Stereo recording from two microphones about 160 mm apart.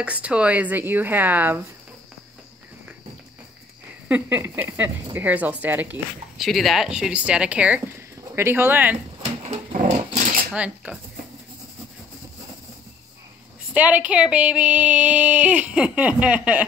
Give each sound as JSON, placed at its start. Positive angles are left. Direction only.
{"t": 0.0, "sound": "speech", "side_deg": -10}
{"t": 4.1, "sound": "speech", "side_deg": -10}
{"t": 6.4, "sound": "speech", "side_deg": 0}
{"t": 9.2, "sound": "dog", "side_deg": -45}
{"t": 10.1, "sound": "a sound", "side_deg": -55}
{"t": 10.5, "sound": "speech", "side_deg": -5}
{"t": 13.7, "sound": "speech", "side_deg": -10}